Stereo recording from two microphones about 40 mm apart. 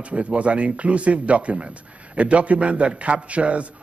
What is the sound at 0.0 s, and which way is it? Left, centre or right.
Speech, right.